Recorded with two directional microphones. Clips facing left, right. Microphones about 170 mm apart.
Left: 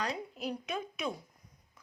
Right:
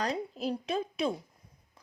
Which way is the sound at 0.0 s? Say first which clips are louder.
Right 4 dB; 35° right (ahead or behind).